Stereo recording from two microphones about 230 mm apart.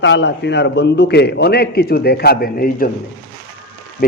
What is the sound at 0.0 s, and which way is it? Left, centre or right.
A man's voice, left.